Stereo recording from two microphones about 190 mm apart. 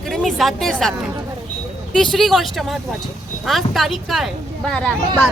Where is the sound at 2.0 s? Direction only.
Centre (ahead or behind).